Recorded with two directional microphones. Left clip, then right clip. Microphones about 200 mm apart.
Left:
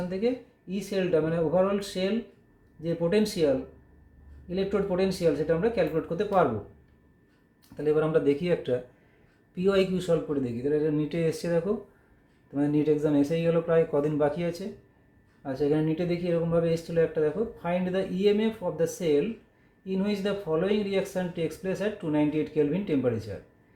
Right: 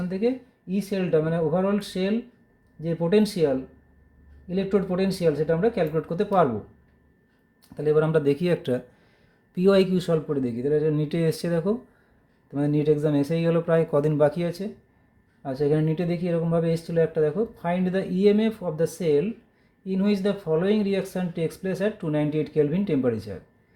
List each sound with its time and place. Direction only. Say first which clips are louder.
0.7 s speech: right 2 dB; 50° right (ahead or behind)
7.8 s speech: right 3 dB; 50° right (ahead or behind)